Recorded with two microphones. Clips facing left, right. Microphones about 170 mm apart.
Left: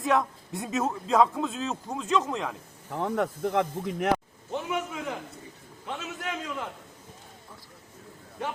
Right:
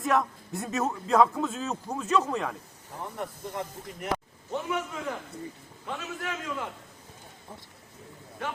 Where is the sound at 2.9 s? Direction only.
85° left.